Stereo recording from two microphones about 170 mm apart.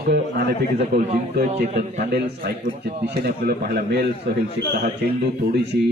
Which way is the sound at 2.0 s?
70° right (ahead or behind).